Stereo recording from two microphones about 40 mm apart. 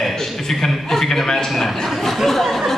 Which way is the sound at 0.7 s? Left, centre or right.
Centre.